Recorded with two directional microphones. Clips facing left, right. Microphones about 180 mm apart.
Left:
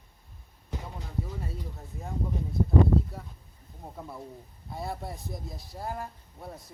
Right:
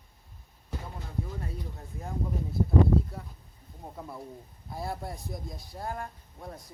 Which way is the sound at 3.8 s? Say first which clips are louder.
Even; centre (ahead or behind).